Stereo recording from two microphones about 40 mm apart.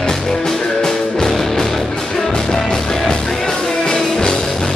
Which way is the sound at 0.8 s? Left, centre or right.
Centre.